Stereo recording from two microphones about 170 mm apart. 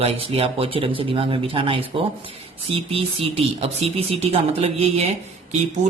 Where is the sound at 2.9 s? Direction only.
35° right (ahead or behind).